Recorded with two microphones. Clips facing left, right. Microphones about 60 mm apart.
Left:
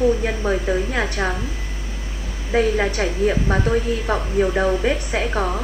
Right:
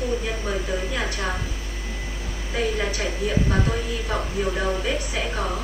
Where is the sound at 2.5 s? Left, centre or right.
Left.